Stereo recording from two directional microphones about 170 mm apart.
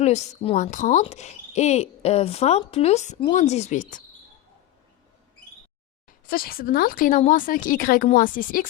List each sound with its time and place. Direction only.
0.0 s speech: 40° left (ahead or behind)
6.1 s speech: 60° left (ahead or behind)